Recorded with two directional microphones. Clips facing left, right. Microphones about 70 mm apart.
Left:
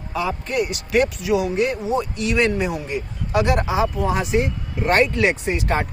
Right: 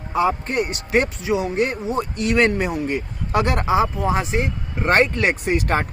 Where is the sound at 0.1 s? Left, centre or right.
Right.